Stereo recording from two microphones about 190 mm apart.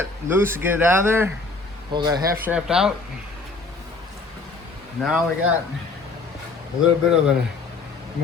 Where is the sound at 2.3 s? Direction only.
10° right (ahead or behind).